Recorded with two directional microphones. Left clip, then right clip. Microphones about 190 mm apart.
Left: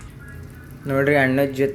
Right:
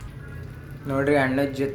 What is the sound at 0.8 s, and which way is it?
Speech, 25° left (ahead or behind).